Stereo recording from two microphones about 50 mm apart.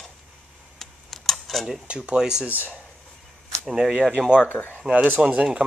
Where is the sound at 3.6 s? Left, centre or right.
Centre.